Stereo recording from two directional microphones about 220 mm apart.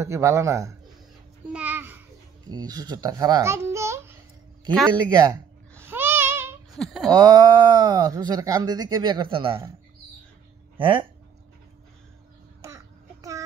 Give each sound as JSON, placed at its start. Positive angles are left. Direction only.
{"t": 0.0, "sound": "a man's voice", "side_deg": -15}
{"t": 1.5, "sound": "babbling", "side_deg": -5}
{"t": 2.5, "sound": "a child's voice", "side_deg": -15}
{"t": 5.1, "sound": "babbling", "side_deg": -15}
{"t": 6.7, "sound": "speech", "side_deg": 0}
{"t": 7.1, "sound": "speech", "side_deg": -20}
{"t": 10.8, "sound": "speech", "side_deg": -25}
{"t": 12.6, "sound": "a sound", "side_deg": -15}